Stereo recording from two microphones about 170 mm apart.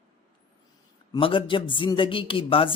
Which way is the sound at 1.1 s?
30° left (ahead or behind).